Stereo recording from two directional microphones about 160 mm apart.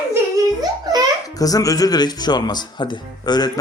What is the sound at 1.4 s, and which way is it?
Speech, 20° left (ahead or behind).